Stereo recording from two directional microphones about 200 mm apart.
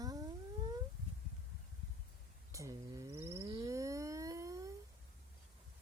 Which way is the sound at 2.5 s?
15° right (ahead or behind).